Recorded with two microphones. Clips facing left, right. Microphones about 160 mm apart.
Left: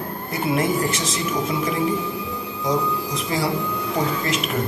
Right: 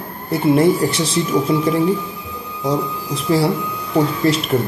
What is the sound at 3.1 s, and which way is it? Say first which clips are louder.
Speech: right 9 dB; 35° right (ahead or behind).